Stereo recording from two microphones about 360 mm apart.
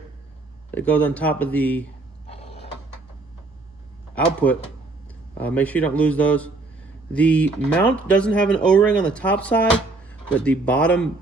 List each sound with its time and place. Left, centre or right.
0.7 s speech: centre
2.2 s mechanisms: centre
4.1 s speech: centre